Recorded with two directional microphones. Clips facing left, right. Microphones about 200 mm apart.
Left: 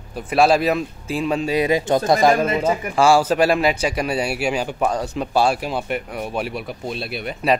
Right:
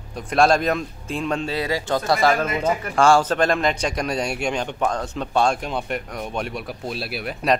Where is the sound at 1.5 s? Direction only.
20° left (ahead or behind).